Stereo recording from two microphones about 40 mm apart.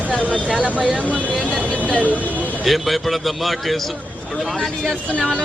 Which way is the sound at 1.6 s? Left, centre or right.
Right.